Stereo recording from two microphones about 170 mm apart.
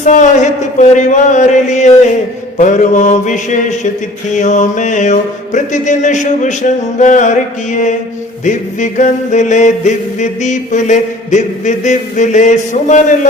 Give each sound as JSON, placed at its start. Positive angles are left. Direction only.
{"t": 0.0, "sound": "chant", "side_deg": 45}